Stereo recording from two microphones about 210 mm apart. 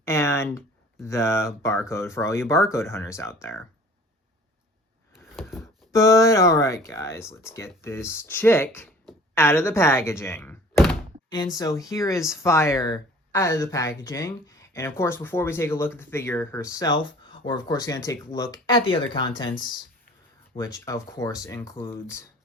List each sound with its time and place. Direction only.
0.0 s a sound: 10° left (ahead or behind)
1.0 s speech: 15° left (ahead or behind)
5.9 s speech: 15° left (ahead or behind)
20.6 s speech: 15° left (ahead or behind)